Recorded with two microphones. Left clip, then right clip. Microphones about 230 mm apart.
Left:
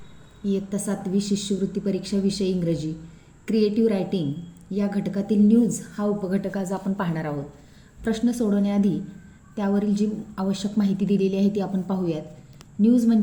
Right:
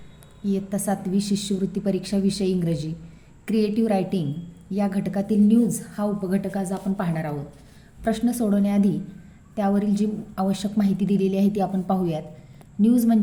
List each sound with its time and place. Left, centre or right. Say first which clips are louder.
0.4 s a woman's voice: right 1 dB; right